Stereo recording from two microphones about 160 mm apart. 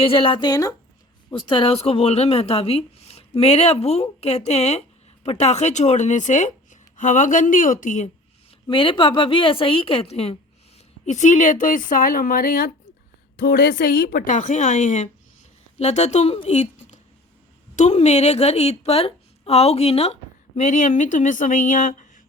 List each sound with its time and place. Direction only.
0.0 s a woman's voice: 35° left (ahead or behind); by 8.1 s 50° left (ahead or behind)
8.6 s a woman's voice: 30° left (ahead or behind); by 22.2 s 55° left (ahead or behind)